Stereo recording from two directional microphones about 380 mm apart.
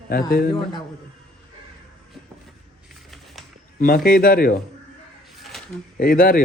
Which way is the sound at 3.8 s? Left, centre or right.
Left.